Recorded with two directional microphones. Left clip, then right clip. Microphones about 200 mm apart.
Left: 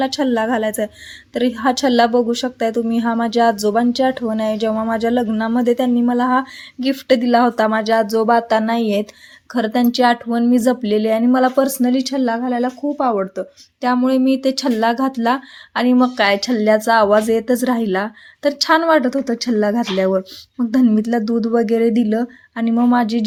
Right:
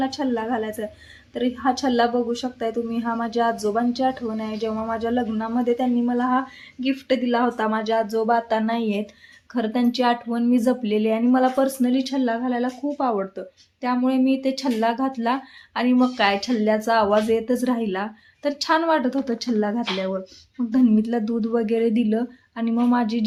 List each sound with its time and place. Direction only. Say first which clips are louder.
0.0 s a woman's voice: left 7 dB; 50° left (ahead or behind)